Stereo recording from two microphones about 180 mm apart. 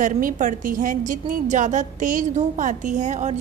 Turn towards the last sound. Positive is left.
turn(degrees=-40)  # may be behind; listen again after turning